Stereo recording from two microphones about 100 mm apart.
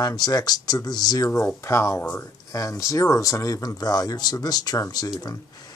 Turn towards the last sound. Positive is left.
turn(degrees=35)  # may be behind; listen again after turning